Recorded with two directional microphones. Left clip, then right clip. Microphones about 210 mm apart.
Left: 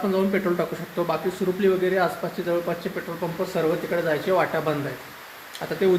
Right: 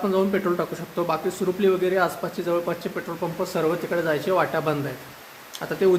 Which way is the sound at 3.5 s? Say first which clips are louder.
Even; 20° right (ahead or behind).